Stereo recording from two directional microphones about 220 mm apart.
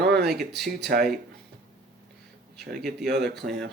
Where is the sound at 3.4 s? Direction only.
35° right (ahead or behind).